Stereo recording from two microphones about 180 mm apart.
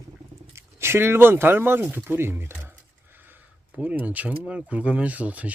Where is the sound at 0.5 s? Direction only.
15° right (ahead or behind).